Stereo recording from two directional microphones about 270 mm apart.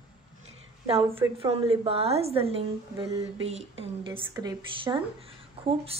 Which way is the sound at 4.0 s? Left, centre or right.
Centre.